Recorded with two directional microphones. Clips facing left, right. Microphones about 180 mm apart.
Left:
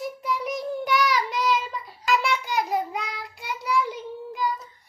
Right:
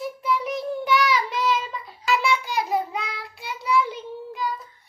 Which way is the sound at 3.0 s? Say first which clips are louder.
Right 1 dB; 45° left (ahead or behind).